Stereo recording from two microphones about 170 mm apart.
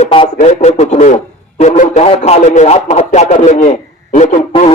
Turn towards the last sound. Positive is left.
turn(degrees=35)  # may be behind; listen again after turning